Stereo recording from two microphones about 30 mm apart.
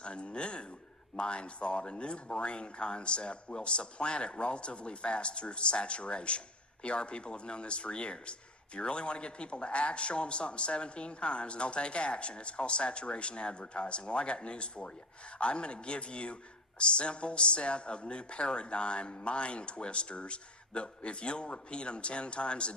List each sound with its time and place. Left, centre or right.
0.0 s speech: left